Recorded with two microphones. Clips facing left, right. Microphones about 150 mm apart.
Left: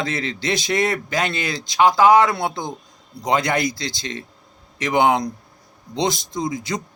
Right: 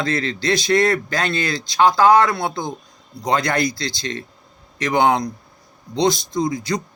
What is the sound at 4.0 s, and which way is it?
Speech, 20° left (ahead or behind).